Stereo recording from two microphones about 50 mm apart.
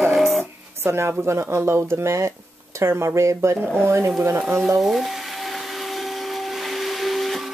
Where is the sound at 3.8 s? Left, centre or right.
Right.